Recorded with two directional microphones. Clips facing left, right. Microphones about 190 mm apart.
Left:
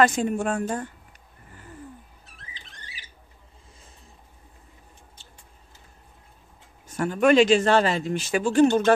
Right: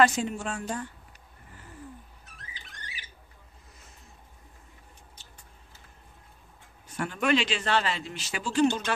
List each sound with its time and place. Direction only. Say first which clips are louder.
0.0 s a man's voice: left 3 dB; 50° left (ahead or behind)
6.9 s a man's voice: left 7 dB; 45° left (ahead or behind)